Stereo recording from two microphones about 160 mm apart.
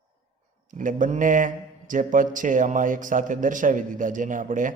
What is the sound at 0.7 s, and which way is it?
A man's voice, 55° right (ahead or behind).